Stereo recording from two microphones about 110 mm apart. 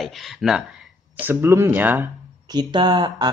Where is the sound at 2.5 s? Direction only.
40° right (ahead or behind).